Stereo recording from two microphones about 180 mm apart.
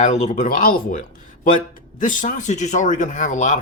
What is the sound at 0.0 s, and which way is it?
Speech, 40° left (ahead or behind).